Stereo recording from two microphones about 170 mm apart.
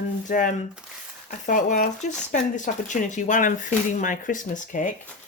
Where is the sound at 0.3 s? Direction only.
55° left (ahead or behind).